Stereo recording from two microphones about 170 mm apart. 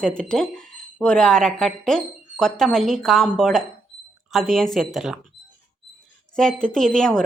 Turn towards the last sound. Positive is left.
turn(degrees=5)  # may be behind; listen again after turning